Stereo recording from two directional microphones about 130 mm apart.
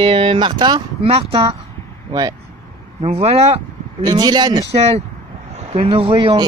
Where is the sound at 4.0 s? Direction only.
30° right (ahead or behind).